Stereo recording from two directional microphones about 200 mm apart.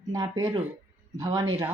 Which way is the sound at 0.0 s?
20° right (ahead or behind).